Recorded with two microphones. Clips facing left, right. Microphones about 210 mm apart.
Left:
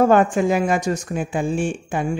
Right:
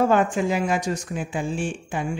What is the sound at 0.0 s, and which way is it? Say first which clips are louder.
Speech: left 4 dB; 50° left (ahead or behind).